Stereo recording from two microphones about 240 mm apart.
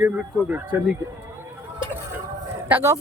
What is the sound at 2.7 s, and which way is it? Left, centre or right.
Speech, centre.